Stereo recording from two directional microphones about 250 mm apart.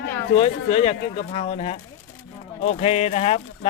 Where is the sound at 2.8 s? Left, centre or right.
Left.